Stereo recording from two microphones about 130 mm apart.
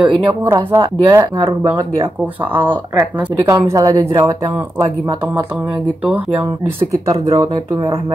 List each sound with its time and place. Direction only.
0.0 s speech: 20° right (ahead or behind)
3.4 s speech: 25° right (ahead or behind)
7.1 s speech: 25° right (ahead or behind)